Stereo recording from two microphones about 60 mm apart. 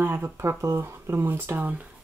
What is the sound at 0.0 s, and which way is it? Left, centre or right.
Speech, right.